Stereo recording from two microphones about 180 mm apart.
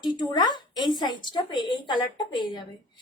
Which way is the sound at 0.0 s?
25° left (ahead or behind).